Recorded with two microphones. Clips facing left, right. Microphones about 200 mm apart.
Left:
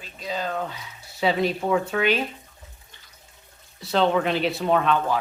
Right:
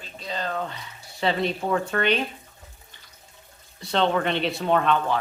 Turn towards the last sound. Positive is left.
turn(degrees=0)  # may be behind; listen again after turning